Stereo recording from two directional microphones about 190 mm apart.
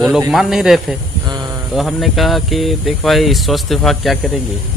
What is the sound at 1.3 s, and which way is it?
Speech, 20° right (ahead or behind).